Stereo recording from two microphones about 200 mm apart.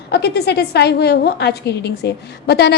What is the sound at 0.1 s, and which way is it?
A woman's voice, 55° left (ahead or behind).